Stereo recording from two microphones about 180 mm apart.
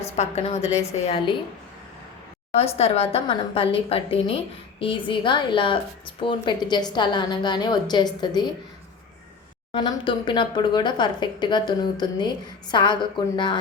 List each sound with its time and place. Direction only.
0.2 s a woman's voice: 35° left (ahead or behind)
2.5 s a woman's voice: 35° left (ahead or behind)
9.7 s a woman's voice: 25° left (ahead or behind)